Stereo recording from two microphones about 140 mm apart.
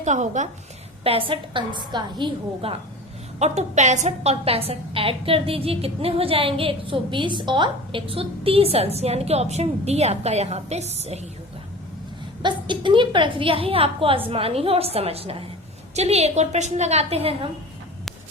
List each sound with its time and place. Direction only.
0.0 s a woman's voice: 60° right (ahead or behind)
1.0 s a woman's voice: 40° right (ahead or behind)
3.3 s a woman's voice: 55° right (ahead or behind)
12.4 s a woman's voice: 35° right (ahead or behind)